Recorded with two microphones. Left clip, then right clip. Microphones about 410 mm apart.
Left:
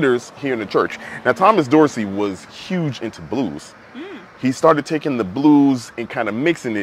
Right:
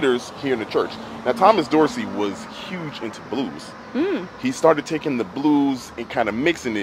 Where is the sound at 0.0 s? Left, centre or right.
Left.